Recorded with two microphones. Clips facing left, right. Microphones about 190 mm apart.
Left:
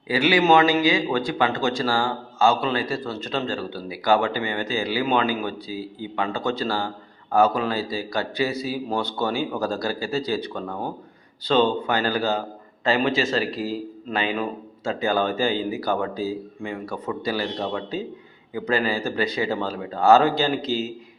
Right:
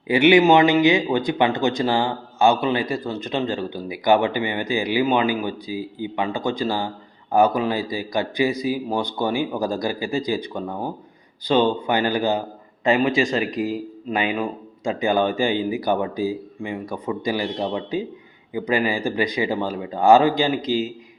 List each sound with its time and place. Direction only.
0.1 s speech: 20° right (ahead or behind)